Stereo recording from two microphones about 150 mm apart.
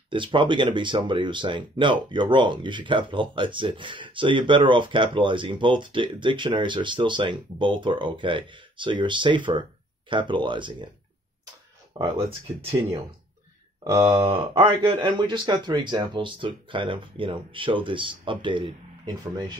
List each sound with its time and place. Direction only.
0.1 s speech: 35° right (ahead or behind)
11.9 s speech: 30° right (ahead or behind)
13.8 s speech: 20° right (ahead or behind)
14.2 s speech: 35° right (ahead or behind)